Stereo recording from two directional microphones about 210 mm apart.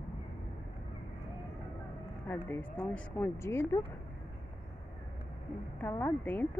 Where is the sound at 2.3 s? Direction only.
10° left (ahead or behind).